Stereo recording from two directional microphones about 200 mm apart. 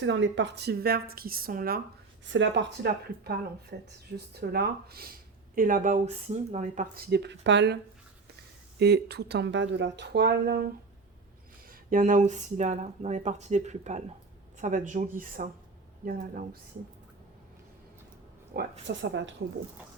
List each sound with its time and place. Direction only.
0.0 s speech: 65° right (ahead or behind); by 1.8 s 45° right (ahead or behind)
2.2 s speech: 65° right (ahead or behind)
3.3 s speech: 55° right (ahead or behind)
8.8 s speech: 55° right (ahead or behind)
11.7 s speech: 45° right (ahead or behind)
18.5 s speech: 65° right (ahead or behind)